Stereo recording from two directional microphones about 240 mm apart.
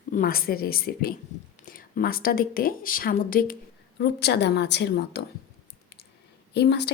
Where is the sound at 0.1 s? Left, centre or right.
Left.